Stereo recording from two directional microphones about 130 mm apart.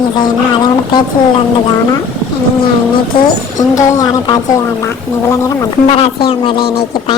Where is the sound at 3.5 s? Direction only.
30° left (ahead or behind).